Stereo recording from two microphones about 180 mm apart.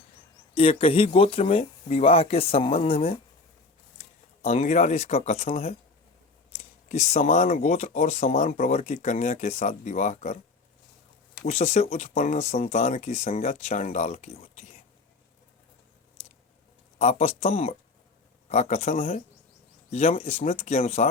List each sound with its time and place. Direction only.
0.5 s speech: 30° left (ahead or behind)
4.4 s speech: 40° left (ahead or behind)
11.4 s speech: 40° left (ahead or behind)
16.2 s a sound: 35° left (ahead or behind)
17.0 s speech: 40° left (ahead or behind)